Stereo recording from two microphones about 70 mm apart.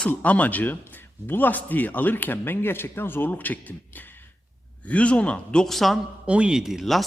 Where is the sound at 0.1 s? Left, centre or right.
Left.